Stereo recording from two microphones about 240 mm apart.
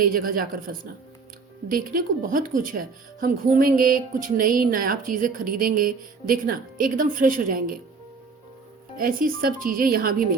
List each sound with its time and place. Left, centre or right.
0.0 s a woman's voice: right
9.0 s a woman's voice: right